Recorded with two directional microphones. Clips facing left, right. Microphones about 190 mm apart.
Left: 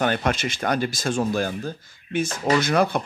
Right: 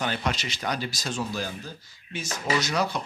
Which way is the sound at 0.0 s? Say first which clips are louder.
Left 6 dB; 55° left (ahead or behind).